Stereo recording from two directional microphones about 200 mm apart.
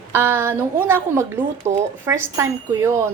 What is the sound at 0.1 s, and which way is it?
Speech, 10° right (ahead or behind).